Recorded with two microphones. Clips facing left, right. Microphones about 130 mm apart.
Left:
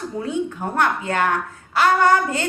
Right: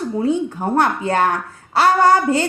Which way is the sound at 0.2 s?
30° right (ahead or behind).